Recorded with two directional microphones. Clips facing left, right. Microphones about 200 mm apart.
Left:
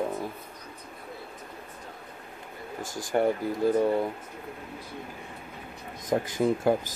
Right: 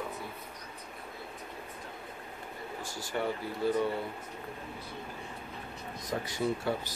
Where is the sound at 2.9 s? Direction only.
50° left (ahead or behind).